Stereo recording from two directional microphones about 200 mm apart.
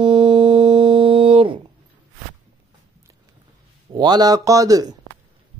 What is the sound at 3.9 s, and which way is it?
Speech, 20° right (ahead or behind).